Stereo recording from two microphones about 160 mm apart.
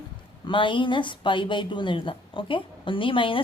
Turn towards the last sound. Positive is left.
turn(degrees=30)  # may be behind; listen again after turning